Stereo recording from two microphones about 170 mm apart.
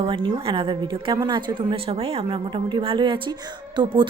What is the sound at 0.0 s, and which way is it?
A woman's voice, 30° right (ahead or behind).